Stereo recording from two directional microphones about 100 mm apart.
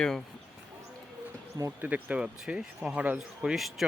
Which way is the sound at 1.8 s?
15° right (ahead or behind).